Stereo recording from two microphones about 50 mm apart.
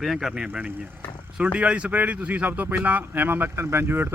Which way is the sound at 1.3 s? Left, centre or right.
Right.